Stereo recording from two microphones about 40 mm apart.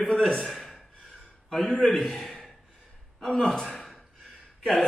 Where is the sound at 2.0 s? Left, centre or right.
Centre.